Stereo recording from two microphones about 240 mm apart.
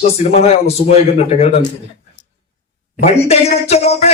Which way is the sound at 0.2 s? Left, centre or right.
Left.